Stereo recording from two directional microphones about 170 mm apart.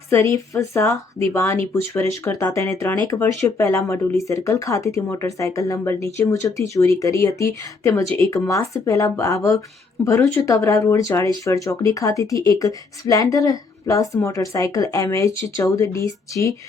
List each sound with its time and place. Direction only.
0.1 s a woman's voice: 15° left (ahead or behind)